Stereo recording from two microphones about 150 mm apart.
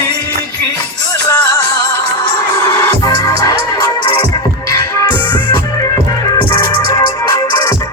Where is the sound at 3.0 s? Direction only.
25° left (ahead or behind).